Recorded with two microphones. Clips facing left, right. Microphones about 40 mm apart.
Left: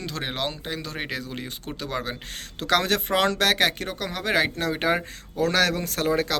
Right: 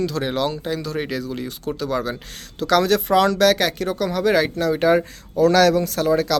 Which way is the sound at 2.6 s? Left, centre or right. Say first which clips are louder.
Right 5 dB; left.